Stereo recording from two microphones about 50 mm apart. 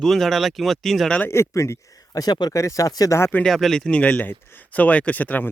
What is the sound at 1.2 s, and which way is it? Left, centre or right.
Speech, left.